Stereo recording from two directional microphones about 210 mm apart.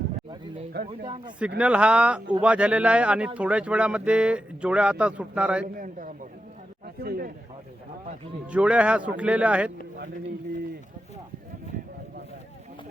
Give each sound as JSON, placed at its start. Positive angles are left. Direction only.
{"t": 0.7, "sound": "speech", "side_deg": -50}
{"t": 1.5, "sound": "speech", "side_deg": -5}
{"t": 5.6, "sound": "a man's voice", "side_deg": -40}
{"t": 8.4, "sound": "speech", "side_deg": -5}